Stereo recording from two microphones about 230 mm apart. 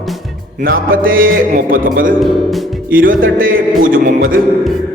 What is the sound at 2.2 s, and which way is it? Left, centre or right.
Speech, centre.